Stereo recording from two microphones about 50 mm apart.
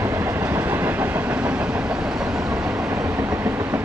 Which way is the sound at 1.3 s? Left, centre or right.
Right.